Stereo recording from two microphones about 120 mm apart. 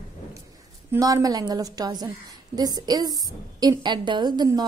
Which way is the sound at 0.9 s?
30° right (ahead or behind).